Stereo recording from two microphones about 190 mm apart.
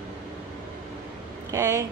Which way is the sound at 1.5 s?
15° right (ahead or behind).